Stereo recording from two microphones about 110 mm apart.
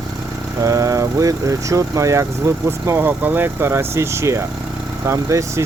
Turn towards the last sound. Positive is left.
turn(degrees=-30)  # may be behind; listen again after turning